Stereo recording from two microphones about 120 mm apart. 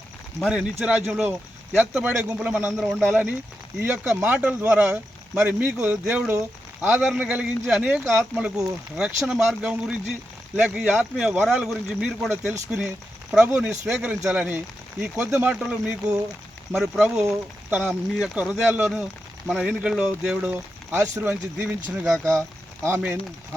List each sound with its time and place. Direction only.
0.5 s speech: 10° right (ahead or behind)
2.7 s speech: centre (ahead or behind)
3.0 s speech: 15° right (ahead or behind)
15.5 s speech: 5° right (ahead or behind); by 23.0 s 25° right (ahead or behind)